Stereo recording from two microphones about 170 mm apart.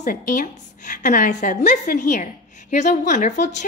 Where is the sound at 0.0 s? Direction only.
50° left (ahead or behind).